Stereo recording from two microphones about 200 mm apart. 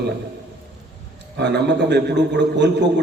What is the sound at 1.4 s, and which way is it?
A man's voice, 60° right (ahead or behind).